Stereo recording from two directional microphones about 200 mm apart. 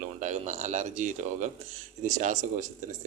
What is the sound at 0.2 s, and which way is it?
A man's voice, 35° right (ahead or behind).